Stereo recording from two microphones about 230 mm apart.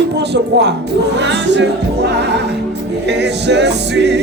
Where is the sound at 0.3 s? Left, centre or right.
Right.